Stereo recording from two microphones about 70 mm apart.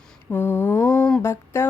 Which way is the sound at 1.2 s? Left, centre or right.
Left.